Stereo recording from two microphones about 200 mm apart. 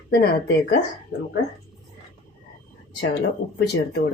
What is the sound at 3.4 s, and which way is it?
Speech, 70° left (ahead or behind).